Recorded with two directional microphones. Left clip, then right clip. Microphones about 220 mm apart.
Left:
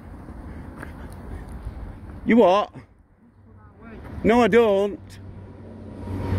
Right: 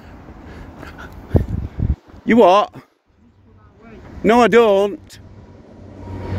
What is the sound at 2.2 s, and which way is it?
Speech, 40° right (ahead or behind).